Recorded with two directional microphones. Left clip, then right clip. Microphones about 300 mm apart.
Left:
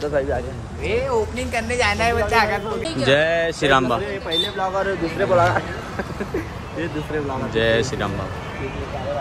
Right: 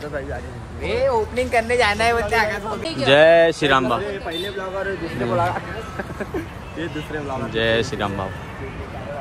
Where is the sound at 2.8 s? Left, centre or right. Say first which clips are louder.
Even; right.